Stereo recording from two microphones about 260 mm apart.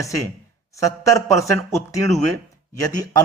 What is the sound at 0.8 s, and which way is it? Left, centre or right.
A man's voice, centre.